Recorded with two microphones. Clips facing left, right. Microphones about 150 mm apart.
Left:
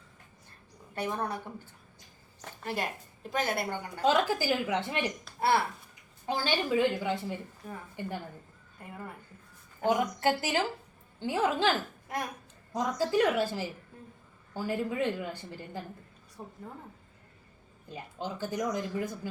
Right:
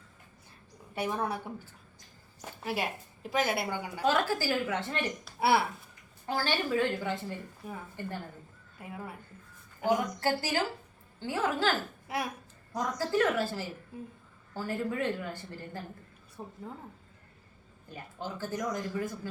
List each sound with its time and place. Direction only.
0.9 s a woman's voice: 10° right (ahead or behind)
4.0 s speech: 20° left (ahead or behind)
5.2 s speech: 10° right (ahead or behind)
6.2 s speech: 20° left (ahead or behind)
7.6 s a woman's voice: 10° right (ahead or behind)
8.8 s speech: 5° right (ahead or behind)
9.8 s a woman's voice: 20° left (ahead or behind)
12.0 s speech: 5° right (ahead or behind)
12.7 s speech: 15° left (ahead or behind)
16.4 s speech: 5° right (ahead or behind)
17.8 s speech: 20° left (ahead or behind)